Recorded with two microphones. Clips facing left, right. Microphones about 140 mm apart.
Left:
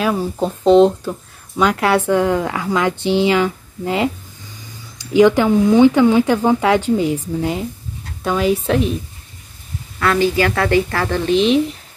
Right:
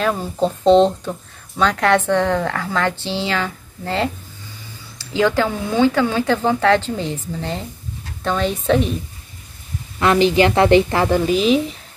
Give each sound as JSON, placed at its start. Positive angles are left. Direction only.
{"t": 0.0, "sound": "a woman's voice", "side_deg": 5}
{"t": 9.9, "sound": "a woman's voice", "side_deg": -20}